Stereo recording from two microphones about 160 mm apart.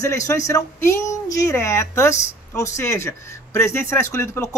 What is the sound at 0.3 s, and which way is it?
Speech, 20° left (ahead or behind).